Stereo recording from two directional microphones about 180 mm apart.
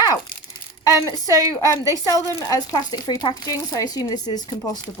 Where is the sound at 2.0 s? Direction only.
20° left (ahead or behind).